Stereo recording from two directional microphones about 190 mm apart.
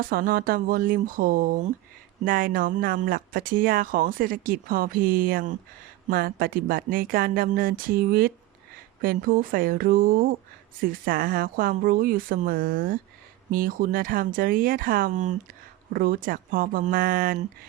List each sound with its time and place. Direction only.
0.0 s speech: 50° right (ahead or behind)